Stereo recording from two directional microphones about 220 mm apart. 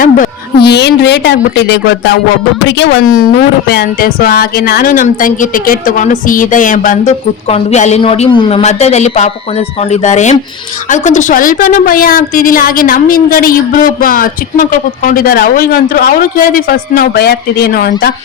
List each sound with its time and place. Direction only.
0.0 s a woman's voice: 45° left (ahead or behind)